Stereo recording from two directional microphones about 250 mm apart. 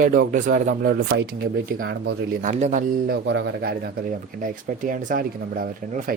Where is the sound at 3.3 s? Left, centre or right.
Right.